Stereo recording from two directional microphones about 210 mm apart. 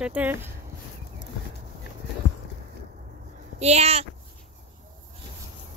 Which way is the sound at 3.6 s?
30° right (ahead or behind).